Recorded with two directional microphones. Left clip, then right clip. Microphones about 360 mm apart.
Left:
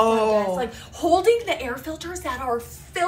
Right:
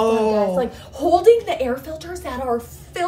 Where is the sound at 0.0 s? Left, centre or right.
Centre.